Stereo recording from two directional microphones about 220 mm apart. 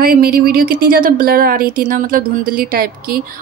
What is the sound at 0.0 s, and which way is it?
A woman's voice, 40° right (ahead or behind).